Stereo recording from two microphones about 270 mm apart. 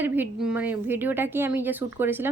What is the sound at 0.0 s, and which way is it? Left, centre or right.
Speech, centre.